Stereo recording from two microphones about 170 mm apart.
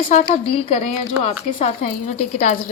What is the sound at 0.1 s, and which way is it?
A woman's voice, 30° left (ahead or behind).